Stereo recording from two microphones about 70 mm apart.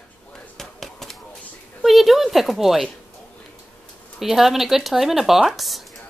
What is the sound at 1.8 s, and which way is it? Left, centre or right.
Speech, centre.